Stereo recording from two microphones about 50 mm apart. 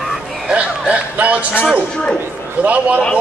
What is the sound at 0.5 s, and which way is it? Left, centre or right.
Speech, right.